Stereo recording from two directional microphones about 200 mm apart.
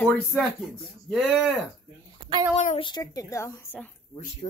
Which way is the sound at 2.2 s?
20° right (ahead or behind).